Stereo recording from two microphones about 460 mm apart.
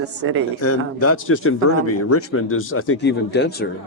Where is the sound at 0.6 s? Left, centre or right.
Left.